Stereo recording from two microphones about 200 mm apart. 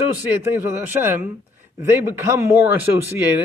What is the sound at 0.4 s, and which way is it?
Speech, 10° right (ahead or behind).